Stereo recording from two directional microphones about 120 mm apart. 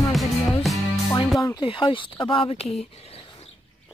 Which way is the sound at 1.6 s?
45° left (ahead or behind).